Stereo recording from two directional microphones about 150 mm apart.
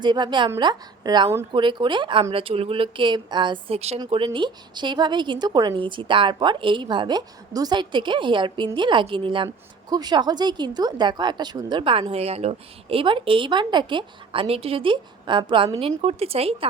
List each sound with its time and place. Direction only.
0.0 s a woman's voice: 30° right (ahead or behind)
15.9 s speech: 45° right (ahead or behind)